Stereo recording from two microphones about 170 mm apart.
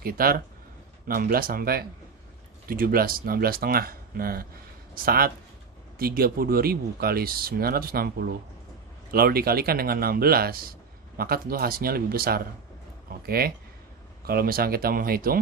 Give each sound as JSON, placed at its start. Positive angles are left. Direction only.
{"t": 0.0, "sound": "speech", "side_deg": -60}